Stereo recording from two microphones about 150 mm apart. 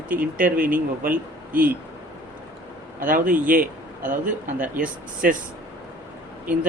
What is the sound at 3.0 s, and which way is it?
A man's voice, 65° right (ahead or behind).